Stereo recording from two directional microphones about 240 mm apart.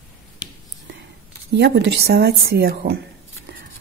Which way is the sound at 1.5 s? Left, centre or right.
Right.